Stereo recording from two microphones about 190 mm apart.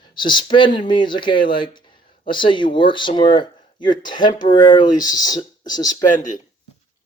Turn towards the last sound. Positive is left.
turn(degrees=40)  # may be behind; listen again after turning